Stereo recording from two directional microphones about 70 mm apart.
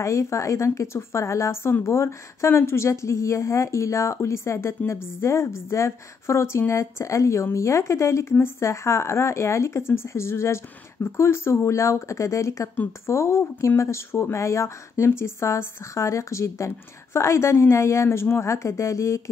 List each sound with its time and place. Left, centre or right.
0.0 s a woman's voice: left